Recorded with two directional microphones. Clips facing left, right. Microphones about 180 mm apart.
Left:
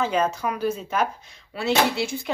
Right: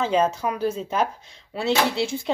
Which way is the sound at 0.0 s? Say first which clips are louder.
Right 2 dB; 25° right (ahead or behind).